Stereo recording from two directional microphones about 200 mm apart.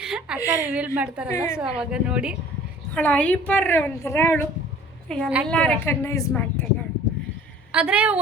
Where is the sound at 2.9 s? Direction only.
5° left (ahead or behind).